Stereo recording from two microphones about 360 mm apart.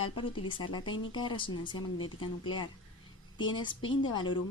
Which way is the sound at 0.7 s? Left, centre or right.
Centre.